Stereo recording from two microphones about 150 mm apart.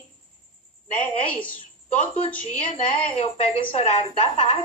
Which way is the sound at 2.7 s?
40° left (ahead or behind).